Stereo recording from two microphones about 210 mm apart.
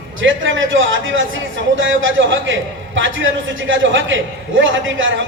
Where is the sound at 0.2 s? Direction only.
65° right (ahead or behind).